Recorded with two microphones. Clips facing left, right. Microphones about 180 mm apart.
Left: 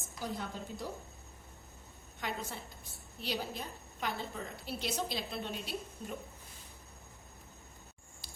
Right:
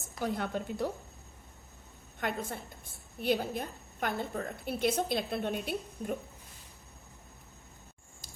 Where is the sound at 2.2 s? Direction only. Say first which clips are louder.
Right 5 dB; 50° right (ahead or behind).